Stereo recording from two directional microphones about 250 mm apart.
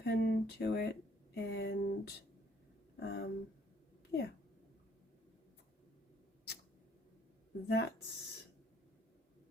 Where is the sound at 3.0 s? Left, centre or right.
Left.